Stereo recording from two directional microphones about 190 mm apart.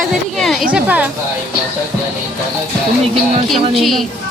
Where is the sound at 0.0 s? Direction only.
Centre (ahead or behind).